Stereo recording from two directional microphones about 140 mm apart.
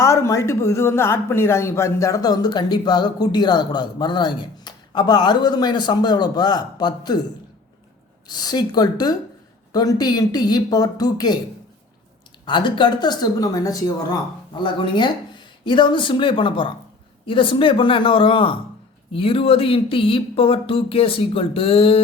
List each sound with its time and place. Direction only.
0.0 s speech: 20° left (ahead or behind)
8.3 s speech: 30° left (ahead or behind)
12.5 s speech: 35° left (ahead or behind)